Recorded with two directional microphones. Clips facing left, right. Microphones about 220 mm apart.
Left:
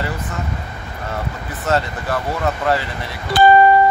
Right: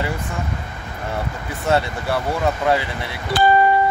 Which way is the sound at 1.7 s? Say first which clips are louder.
Even; 15° right (ahead or behind).